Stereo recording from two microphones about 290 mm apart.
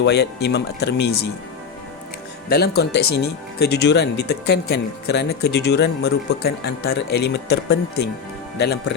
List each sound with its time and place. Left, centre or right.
0.0 s speech: left
2.5 s speech: left